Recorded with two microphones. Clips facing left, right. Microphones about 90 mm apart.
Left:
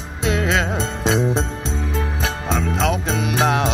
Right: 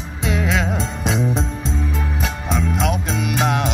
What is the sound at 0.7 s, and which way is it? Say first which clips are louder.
Music: left 2 dB; 90° left.